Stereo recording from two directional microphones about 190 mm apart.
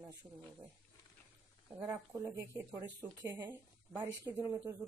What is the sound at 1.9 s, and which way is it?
Speech, 15° right (ahead or behind).